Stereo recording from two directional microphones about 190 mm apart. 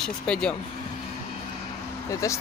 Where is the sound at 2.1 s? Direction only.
15° left (ahead or behind).